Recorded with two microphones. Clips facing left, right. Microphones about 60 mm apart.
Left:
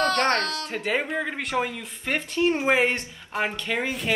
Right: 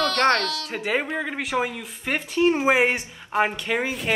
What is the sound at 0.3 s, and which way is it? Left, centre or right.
Speech, left.